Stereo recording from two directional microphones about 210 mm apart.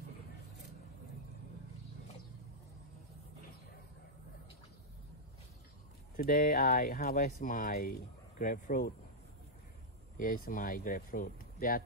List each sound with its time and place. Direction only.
6.1 s speech: 45° left (ahead or behind)
10.1 s speech: 40° left (ahead or behind)